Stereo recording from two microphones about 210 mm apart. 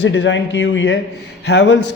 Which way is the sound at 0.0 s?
55° left (ahead or behind).